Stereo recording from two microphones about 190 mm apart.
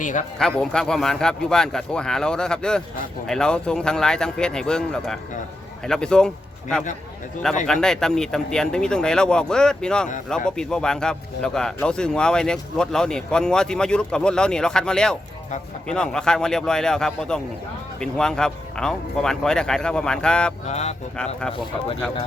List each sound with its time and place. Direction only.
0.0 s speech: 40° left (ahead or behind)
0.3 s speech: 5° left (ahead or behind)
20.7 s speech: 35° left (ahead or behind)